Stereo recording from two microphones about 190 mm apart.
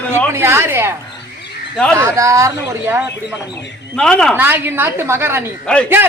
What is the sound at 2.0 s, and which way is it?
Speech, 15° right (ahead or behind).